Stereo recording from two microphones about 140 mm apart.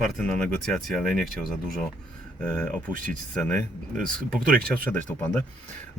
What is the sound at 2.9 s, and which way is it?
Speech, 75° right (ahead or behind).